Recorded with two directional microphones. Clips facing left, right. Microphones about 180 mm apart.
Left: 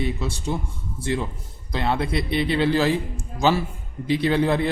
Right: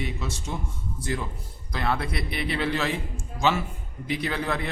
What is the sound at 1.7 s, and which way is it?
A man's voice, 25° left (ahead or behind).